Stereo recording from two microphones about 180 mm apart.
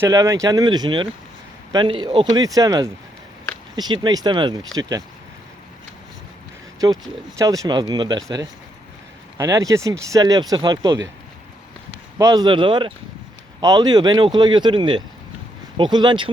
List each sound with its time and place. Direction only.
0.0 s speech: 20° right (ahead or behind)
6.7 s speech: 20° right (ahead or behind)
12.1 s speech: 20° right (ahead or behind)